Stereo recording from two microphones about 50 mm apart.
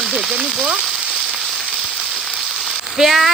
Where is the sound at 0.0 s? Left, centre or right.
Centre.